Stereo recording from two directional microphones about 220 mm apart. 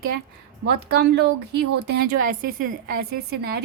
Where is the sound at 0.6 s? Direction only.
45° right (ahead or behind).